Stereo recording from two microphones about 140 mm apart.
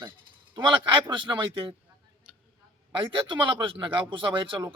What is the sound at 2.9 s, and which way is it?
Speech, 35° right (ahead or behind).